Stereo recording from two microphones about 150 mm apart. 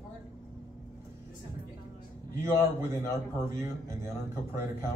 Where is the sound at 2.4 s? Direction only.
20° right (ahead or behind).